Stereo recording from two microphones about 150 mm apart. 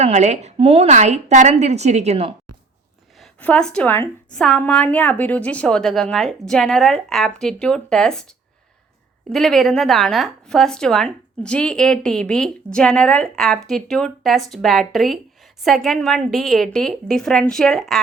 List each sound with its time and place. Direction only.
0.0 s a woman's voice: 50° right (ahead or behind)
3.2 s a woman's voice: 5° left (ahead or behind)
9.3 s a woman's voice: 5° left (ahead or behind)